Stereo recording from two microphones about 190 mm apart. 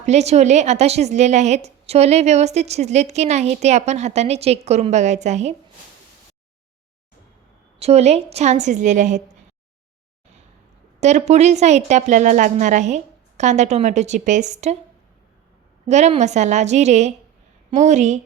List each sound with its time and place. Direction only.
0.0 s speech: 35° right (ahead or behind)
7.8 s speech: 35° right (ahead or behind)
11.0 s speech: 35° right (ahead or behind)
15.9 s speech: 35° right (ahead or behind)